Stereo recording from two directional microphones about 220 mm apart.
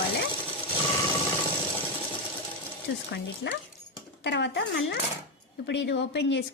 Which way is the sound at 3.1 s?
50° left (ahead or behind).